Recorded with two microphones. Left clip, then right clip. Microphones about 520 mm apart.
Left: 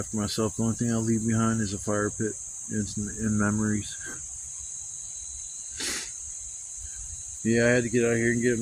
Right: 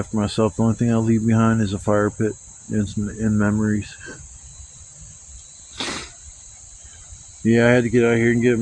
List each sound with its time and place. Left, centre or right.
0.0 s speech: left
5.7 s cricket: left
7.4 s speech: left